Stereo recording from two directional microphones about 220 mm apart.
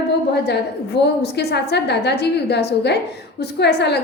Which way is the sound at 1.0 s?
50° left (ahead or behind).